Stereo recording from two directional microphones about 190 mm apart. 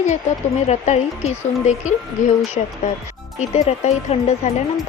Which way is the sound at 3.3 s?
35° left (ahead or behind).